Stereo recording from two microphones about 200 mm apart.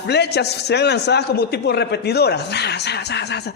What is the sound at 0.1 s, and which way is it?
A man's voice, 55° left (ahead or behind).